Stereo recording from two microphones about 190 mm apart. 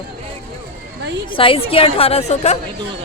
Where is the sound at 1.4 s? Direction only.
30° left (ahead or behind).